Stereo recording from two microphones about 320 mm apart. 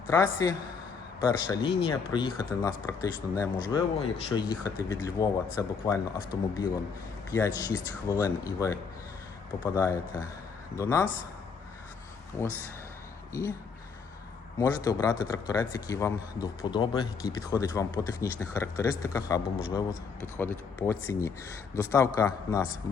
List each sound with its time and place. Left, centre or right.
0.1 s a man's voice: centre
12.3 s a man's voice: centre
14.6 s a man's voice: centre